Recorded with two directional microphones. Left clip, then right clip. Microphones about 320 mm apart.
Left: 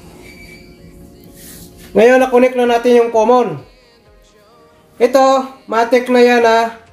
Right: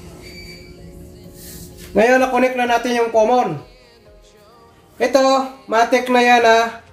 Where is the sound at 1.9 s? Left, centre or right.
Centre.